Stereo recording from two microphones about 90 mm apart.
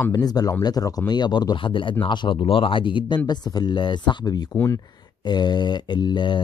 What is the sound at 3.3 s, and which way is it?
Speech, 50° left (ahead or behind).